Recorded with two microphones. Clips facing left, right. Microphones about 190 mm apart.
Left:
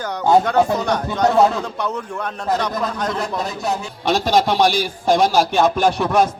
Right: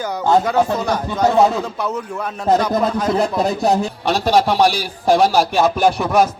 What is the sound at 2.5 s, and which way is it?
Music, 25° right (ahead or behind).